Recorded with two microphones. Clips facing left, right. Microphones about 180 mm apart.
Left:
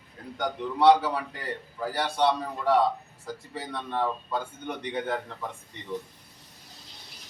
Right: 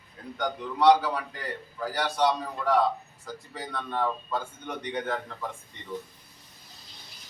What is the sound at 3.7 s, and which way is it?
A man's voice, 25° left (ahead or behind).